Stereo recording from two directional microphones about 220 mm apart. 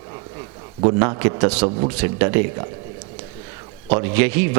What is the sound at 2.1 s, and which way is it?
Speech, 15° right (ahead or behind).